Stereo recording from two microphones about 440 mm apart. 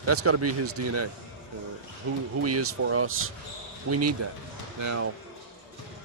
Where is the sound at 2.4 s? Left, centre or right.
Right.